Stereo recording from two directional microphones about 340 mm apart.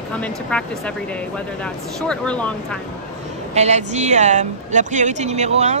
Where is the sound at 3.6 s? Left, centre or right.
Centre.